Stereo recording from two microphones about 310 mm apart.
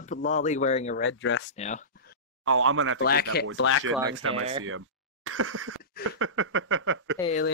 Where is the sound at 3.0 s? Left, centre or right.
Left.